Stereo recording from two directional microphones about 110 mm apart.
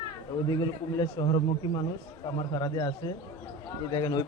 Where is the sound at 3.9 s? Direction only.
40° left (ahead or behind).